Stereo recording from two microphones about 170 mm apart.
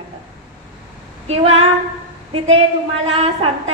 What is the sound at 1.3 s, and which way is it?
A woman's voice, 35° right (ahead or behind).